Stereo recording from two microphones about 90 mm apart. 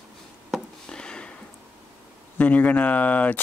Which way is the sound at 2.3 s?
15° left (ahead or behind).